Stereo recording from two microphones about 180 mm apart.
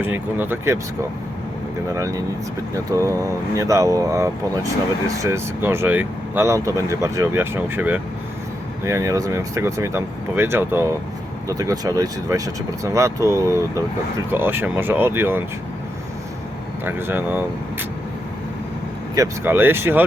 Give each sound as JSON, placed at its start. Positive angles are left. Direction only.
{"t": 0.0, "sound": "speech", "side_deg": -10}
{"t": 2.0, "sound": "speech", "side_deg": -15}
{"t": 16.8, "sound": "speech", "side_deg": -10}
{"t": 19.1, "sound": "speech", "side_deg": -15}